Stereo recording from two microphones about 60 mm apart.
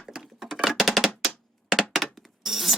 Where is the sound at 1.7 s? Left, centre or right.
Centre.